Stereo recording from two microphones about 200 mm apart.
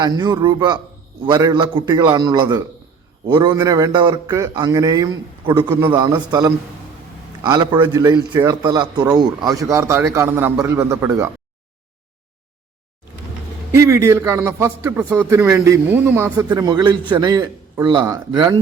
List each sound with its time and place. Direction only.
0.0 s a man's voice: 20° right (ahead or behind)
13.7 s a man's voice: 15° right (ahead or behind)